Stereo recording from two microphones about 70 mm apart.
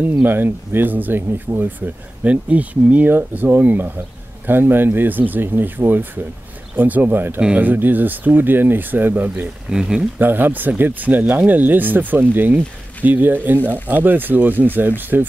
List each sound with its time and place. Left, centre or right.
0.2 s speech: right
9.7 s speech: centre
10.1 s speech: right